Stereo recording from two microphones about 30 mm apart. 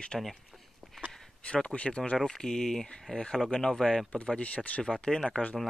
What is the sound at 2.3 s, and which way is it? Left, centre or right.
Speech, centre.